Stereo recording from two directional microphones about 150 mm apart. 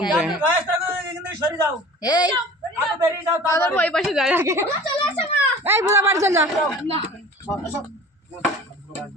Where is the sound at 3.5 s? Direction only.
20° left (ahead or behind).